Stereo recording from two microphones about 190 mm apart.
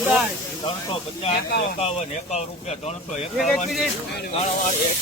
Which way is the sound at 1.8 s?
35° left (ahead or behind).